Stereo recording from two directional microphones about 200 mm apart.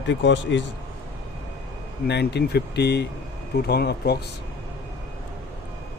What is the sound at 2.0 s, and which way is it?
Speech, 55° left (ahead or behind).